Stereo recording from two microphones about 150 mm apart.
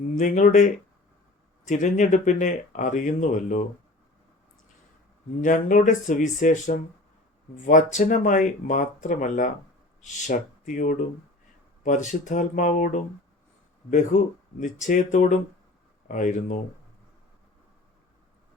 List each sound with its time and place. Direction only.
0.2 s speech: 60° left (ahead or behind)
5.4 s speech: 60° left (ahead or behind)
14.1 s speech: 55° left (ahead or behind)